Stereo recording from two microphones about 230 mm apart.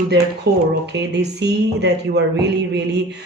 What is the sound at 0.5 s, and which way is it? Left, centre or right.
Speech, right.